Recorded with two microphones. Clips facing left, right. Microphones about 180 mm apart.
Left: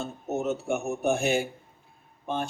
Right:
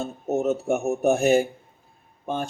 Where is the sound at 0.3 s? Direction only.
40° right (ahead or behind).